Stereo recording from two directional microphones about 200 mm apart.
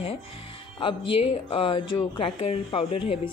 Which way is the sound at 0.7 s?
25° left (ahead or behind).